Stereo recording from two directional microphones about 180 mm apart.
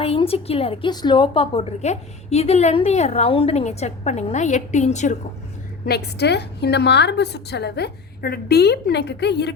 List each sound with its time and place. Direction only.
0.0 s a woman's voice: 30° left (ahead or behind)
5.8 s a woman's voice: 65° left (ahead or behind)